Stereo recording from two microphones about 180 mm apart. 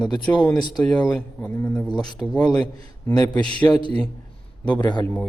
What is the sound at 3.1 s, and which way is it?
Speech, 20° left (ahead or behind).